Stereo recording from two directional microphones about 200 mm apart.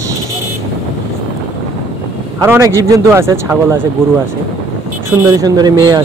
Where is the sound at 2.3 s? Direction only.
15° right (ahead or behind).